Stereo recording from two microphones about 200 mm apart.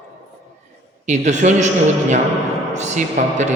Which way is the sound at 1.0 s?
35° right (ahead or behind).